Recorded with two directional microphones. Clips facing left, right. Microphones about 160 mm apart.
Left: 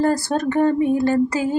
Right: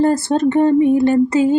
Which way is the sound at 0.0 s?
25° right (ahead or behind).